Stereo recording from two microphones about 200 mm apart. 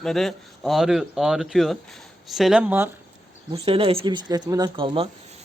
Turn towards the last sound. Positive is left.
turn(degrees=-25)  # may be behind; listen again after turning